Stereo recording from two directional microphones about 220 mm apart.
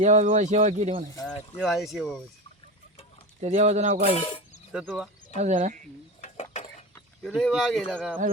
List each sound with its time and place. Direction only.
0.0 s speech: 35° right (ahead or behind)
1.5 s speech: centre (ahead or behind)
3.4 s speech: 30° right (ahead or behind)
4.0 s a sound: 25° left (ahead or behind)
4.7 s speech: centre (ahead or behind)
5.3 s speech: 35° right (ahead or behind)
6.2 s a sound: 30° left (ahead or behind)
6.9 s speech: 5° left (ahead or behind)